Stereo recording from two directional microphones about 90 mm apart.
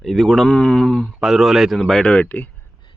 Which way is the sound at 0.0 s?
Centre (ahead or behind).